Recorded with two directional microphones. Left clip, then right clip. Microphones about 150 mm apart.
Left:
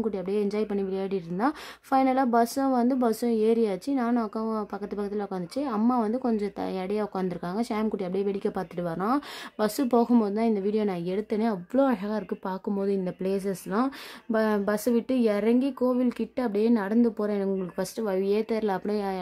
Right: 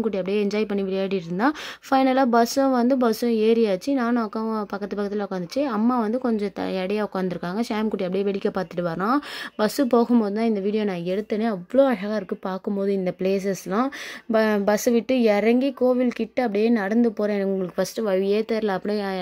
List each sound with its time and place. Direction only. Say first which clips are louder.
0.0 s a woman's voice: right 4 dB; 10° right (ahead or behind)